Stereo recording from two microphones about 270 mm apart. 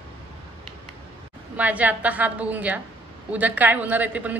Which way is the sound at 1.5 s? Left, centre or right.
Centre.